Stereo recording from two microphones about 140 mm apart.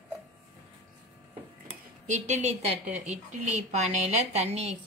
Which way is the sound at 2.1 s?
55° right (ahead or behind).